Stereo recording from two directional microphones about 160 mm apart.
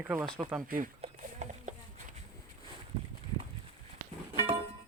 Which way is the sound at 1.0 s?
50° right (ahead or behind).